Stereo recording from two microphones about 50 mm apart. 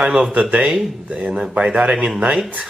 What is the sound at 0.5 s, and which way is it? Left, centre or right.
Speech, centre.